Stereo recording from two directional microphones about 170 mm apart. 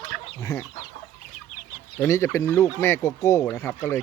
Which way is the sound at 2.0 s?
15° left (ahead or behind).